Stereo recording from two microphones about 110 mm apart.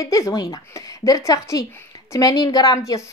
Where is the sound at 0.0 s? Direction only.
30° left (ahead or behind).